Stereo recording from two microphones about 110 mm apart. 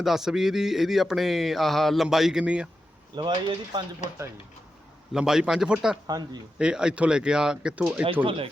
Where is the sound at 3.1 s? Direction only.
45° right (ahead or behind).